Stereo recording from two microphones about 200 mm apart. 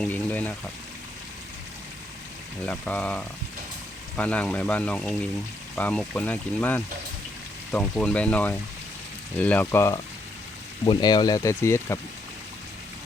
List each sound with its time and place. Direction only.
0.0 s speech: 10° left (ahead or behind)
2.6 s speech: 5° left (ahead or behind)